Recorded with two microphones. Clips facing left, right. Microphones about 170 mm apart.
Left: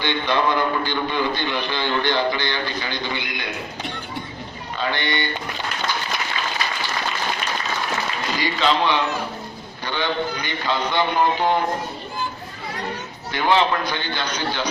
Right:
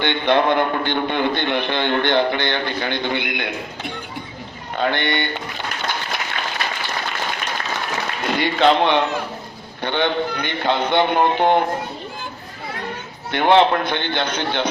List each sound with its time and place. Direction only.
0.0 s a man's voice: 55° right (ahead or behind)
4.8 s a man's voice: 55° right (ahead or behind)
5.9 s applause: 55° right (ahead or behind)
8.2 s a man's voice: 60° right (ahead or behind)
13.3 s a man's voice: 60° right (ahead or behind)